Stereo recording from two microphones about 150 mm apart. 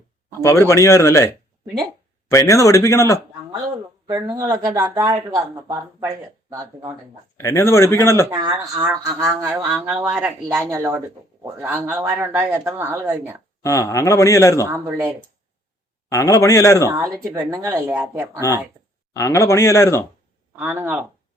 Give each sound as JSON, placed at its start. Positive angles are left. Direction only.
{"t": 0.4, "sound": "speech", "side_deg": 20}
{"t": 2.3, "sound": "speech", "side_deg": 20}
{"t": 4.0, "sound": "speech", "side_deg": -25}
{"t": 7.3, "sound": "speech", "side_deg": 20}
{"t": 8.3, "sound": "speech", "side_deg": -30}
{"t": 9.6, "sound": "speech", "side_deg": -5}
{"t": 13.6, "sound": "speech", "side_deg": 20}
{"t": 14.7, "sound": "speech", "side_deg": -15}
{"t": 16.0, "sound": "speech", "side_deg": 20}
{"t": 16.9, "sound": "speech", "side_deg": -20}
{"t": 19.1, "sound": "speech", "side_deg": 20}
{"t": 20.6, "sound": "speech", "side_deg": -15}